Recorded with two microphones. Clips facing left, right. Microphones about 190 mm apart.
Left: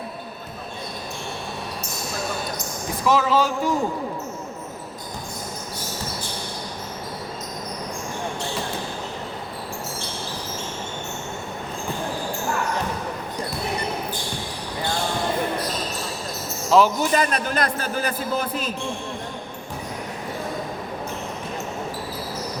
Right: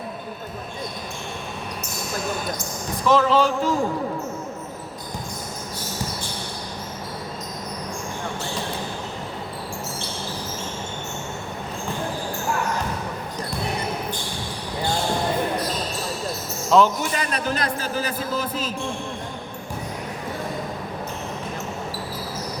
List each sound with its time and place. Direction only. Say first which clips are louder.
3.1 s speech: right 2 dB; 5° left (ahead or behind)
16.6 s a sound: even; 5° left (ahead or behind)
17.0 s a man's voice: left 4 dB; 40° left (ahead or behind)